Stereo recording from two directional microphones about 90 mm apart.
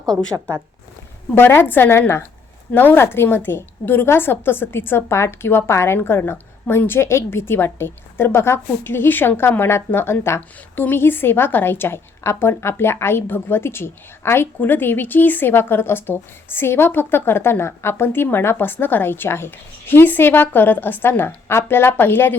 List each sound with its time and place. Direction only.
0.1 s speech: 10° left (ahead or behind)
1.4 s a woman's voice: 25° left (ahead or behind)